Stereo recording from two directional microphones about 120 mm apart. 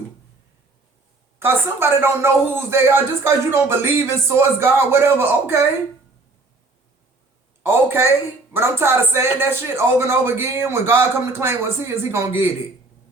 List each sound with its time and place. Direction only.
1.4 s speech: 15° right (ahead or behind)
7.6 s speech: 20° right (ahead or behind)